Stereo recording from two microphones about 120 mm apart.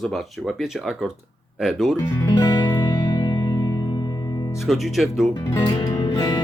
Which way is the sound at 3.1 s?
35° left (ahead or behind).